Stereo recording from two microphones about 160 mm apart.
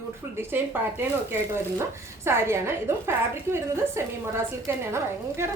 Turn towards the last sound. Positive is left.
turn(degrees=-15)  # may be behind; listen again after turning